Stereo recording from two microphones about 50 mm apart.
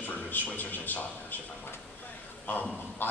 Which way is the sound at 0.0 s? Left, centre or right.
Left.